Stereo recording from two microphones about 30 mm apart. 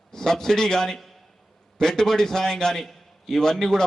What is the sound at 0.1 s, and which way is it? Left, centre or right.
A man's voice, centre.